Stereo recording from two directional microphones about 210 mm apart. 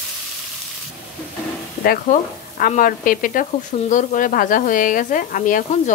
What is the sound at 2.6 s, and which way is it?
Speech, 40° left (ahead or behind).